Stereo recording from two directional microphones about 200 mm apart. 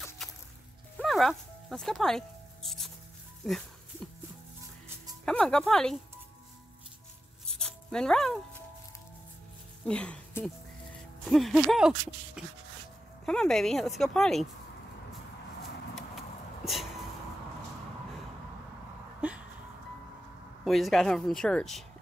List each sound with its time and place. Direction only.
0.2 s music: centre (ahead or behind)
0.9 s speech: centre (ahead or behind)
5.2 s speech: 5° left (ahead or behind)
7.5 s music: 5° left (ahead or behind)
9.8 s speech: 5° left (ahead or behind)
15.9 s a sound: centre (ahead or behind)
19.2 s a sound: 5° right (ahead or behind)
20.6 s speech: centre (ahead or behind)